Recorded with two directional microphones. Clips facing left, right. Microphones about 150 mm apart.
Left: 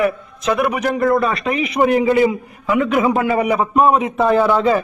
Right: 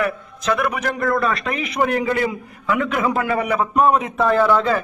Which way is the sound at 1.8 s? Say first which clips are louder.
Left 6 dB; 15° left (ahead or behind).